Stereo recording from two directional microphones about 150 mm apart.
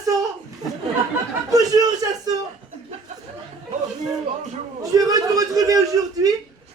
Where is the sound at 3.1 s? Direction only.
55° right (ahead or behind).